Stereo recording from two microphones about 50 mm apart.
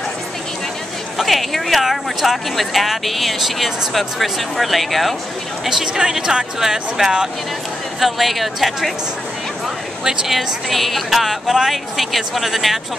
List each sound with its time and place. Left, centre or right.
1.1 s speech: centre
5.7 s speech: centre
10.0 s speech: centre